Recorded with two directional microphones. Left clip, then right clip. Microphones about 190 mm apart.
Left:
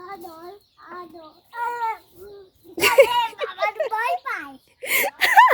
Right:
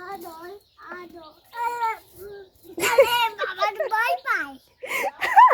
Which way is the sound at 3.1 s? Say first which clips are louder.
Even; centre (ahead or behind).